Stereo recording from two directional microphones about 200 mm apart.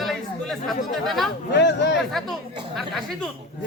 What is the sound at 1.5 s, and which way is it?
Speech, 60° left (ahead or behind).